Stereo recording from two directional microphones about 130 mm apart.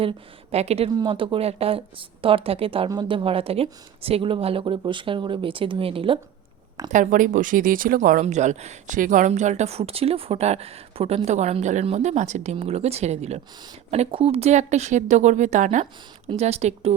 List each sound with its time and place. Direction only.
0.5 s speech: 55° right (ahead or behind)
0.9 s speech: 40° right (ahead or behind)
6.9 s speech: 85° right
16.3 s speech: 55° right (ahead or behind)